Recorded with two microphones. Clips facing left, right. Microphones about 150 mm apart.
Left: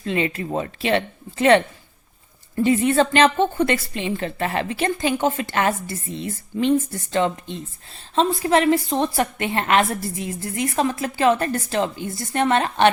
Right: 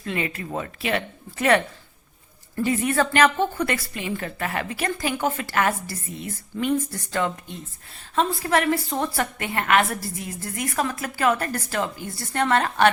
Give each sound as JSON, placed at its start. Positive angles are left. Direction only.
{"t": 0.0, "sound": "a woman's voice", "side_deg": 25}
{"t": 2.6, "sound": "a woman's voice", "side_deg": 25}